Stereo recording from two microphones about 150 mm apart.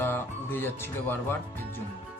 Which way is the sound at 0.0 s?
15° left (ahead or behind).